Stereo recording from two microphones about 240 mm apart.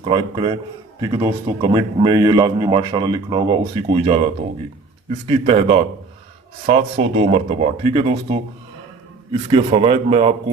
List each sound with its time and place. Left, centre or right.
0.0 s speech: centre
5.3 s speech: right